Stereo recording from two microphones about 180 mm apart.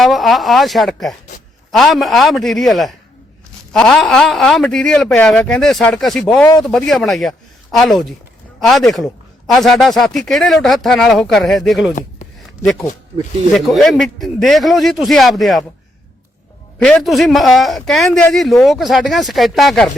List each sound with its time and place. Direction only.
0.0 s a man's voice: centre (ahead or behind)
9.5 s a man's voice: centre (ahead or behind)
12.2 s a sound: 40° left (ahead or behind)
13.5 s a man's voice: centre (ahead or behind)
16.7 s a man's voice: 5° left (ahead or behind)